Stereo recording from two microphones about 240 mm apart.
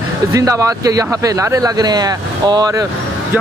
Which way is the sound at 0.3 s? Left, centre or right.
Centre.